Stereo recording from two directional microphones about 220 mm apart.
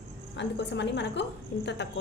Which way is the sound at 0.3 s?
55° left (ahead or behind).